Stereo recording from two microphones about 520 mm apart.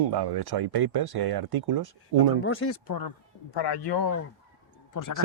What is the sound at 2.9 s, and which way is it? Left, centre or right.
Speech, left.